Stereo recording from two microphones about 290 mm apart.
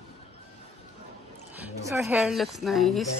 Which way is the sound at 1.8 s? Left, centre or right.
Centre.